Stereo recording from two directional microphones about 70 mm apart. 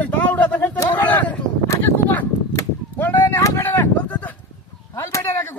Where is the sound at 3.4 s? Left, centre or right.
Left.